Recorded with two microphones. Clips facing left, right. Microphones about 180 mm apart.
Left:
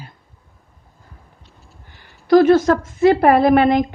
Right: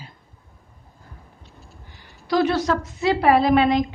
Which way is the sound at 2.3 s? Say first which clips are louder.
Left 9 dB; 50° left (ahead or behind).